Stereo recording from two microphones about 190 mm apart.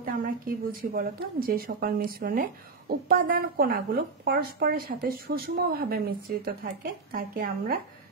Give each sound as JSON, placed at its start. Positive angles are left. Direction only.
{"t": 0.0, "sound": "a woman's voice", "side_deg": -50}